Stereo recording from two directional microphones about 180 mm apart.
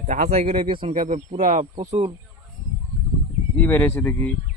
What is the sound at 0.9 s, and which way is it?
Speech, 45° right (ahead or behind).